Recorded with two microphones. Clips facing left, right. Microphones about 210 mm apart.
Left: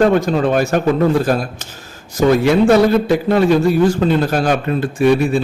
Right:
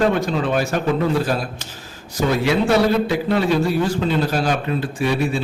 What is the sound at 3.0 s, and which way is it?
A man's voice, 45° left (ahead or behind).